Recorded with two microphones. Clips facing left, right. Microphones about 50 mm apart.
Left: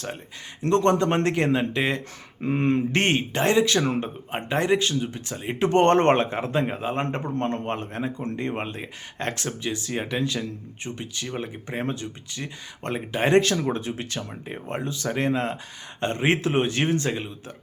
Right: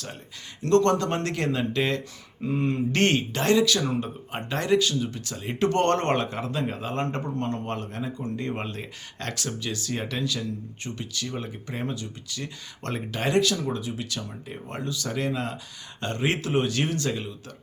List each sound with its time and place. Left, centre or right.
0.6 s speech: left
2.4 s speech: left
2.9 s speech: left
7.3 s speech: left
12.8 s speech: left
13.3 s speech: left